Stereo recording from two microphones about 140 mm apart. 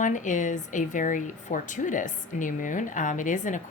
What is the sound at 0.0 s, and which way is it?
Speech, 65° left (ahead or behind).